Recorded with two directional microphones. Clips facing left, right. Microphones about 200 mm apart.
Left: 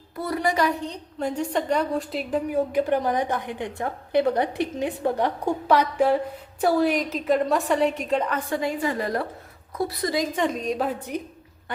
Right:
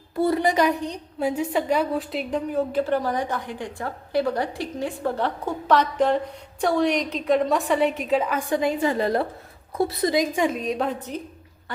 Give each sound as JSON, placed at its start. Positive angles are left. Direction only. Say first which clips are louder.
{"t": 0.2, "sound": "a woman's voice", "louder": "right 4 dB", "side_deg": -25}
{"t": 1.2, "sound": "a woman's voice", "louder": "right 2 dB", "side_deg": -5}
{"t": 8.4, "sound": "a woman's voice", "louder": "right 3 dB", "side_deg": -15}